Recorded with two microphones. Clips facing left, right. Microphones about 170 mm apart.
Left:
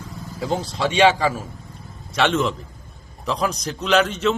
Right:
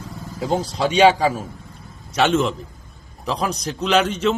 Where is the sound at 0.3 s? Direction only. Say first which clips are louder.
Right 2 dB; 40° right (ahead or behind).